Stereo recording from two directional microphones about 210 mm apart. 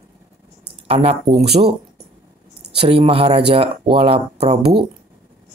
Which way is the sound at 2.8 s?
25° right (ahead or behind).